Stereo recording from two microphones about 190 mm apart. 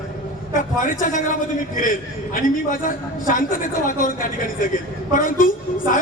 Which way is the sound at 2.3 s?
45° left (ahead or behind).